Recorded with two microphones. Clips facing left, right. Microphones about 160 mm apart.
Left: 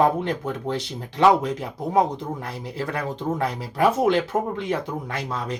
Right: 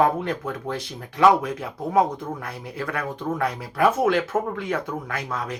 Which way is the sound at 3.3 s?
20° left (ahead or behind).